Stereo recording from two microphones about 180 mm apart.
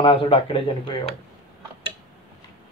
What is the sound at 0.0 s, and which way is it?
Speech, 30° left (ahead or behind).